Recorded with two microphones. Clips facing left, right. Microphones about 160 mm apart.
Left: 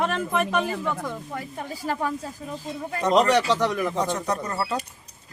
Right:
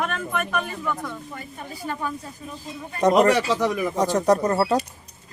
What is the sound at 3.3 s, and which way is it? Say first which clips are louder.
Speech: even; 10° right (ahead or behind).